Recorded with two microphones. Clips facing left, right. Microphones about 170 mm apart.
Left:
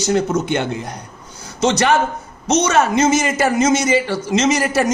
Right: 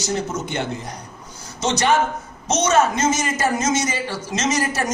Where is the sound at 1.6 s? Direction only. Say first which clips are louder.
Left 5 dB; 60° left (ahead or behind).